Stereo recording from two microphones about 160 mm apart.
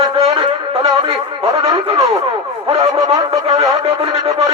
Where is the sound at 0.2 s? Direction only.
35° right (ahead or behind).